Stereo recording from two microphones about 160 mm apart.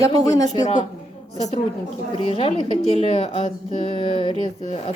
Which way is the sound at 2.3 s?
40° left (ahead or behind).